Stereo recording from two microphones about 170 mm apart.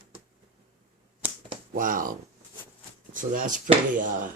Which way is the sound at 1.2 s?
10° right (ahead or behind).